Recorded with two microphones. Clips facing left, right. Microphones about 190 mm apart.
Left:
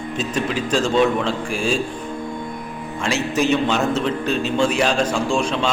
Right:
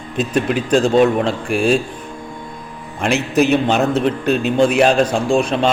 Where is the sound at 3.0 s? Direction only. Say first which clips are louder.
Right 5 dB; 60° right (ahead or behind).